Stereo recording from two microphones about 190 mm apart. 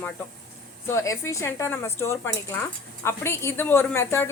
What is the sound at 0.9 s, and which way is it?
A woman's voice, 15° left (ahead or behind).